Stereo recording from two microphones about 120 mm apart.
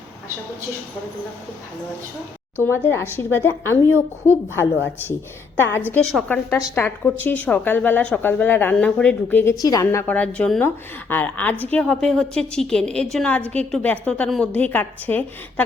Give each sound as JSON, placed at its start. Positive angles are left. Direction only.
{"t": 2.6, "sound": "a woman's voice", "side_deg": 20}
{"t": 9.6, "sound": "a woman's voice", "side_deg": 30}
{"t": 9.8, "sound": "a woman's voice", "side_deg": 20}
{"t": 14.5, "sound": "a woman's voice", "side_deg": 15}